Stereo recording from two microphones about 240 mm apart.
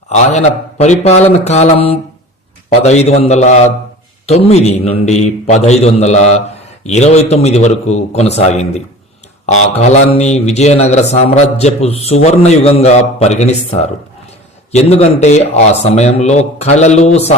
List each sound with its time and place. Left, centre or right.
0.1 s a man's voice: left